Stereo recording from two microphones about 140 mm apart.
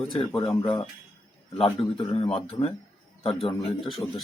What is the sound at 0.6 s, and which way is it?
Speech, 35° left (ahead or behind).